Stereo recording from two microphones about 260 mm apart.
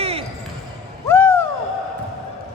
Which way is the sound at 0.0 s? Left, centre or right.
Right.